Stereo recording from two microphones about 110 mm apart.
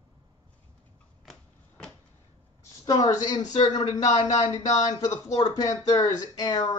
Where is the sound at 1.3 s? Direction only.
5° left (ahead or behind).